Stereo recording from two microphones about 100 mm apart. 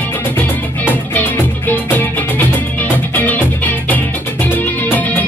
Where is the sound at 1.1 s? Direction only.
20° left (ahead or behind).